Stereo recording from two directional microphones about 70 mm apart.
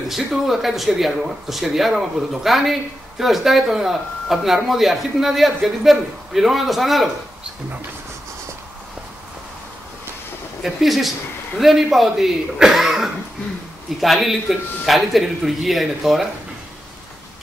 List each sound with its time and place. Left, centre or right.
0.1 s speech: centre
10.6 s speech: centre